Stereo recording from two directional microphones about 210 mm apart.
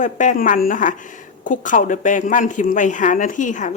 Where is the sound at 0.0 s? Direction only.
35° left (ahead or behind).